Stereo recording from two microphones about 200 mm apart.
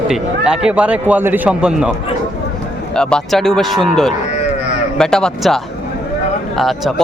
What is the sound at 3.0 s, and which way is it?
A man's voice, 5° left (ahead or behind).